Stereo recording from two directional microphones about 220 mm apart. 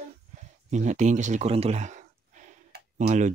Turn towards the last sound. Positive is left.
turn(degrees=-35)  # may be behind; listen again after turning